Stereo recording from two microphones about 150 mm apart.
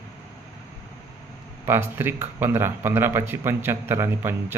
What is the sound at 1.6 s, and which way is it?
Speech, 15° right (ahead or behind).